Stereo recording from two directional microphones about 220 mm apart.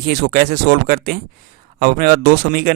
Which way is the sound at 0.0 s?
45° right (ahead or behind).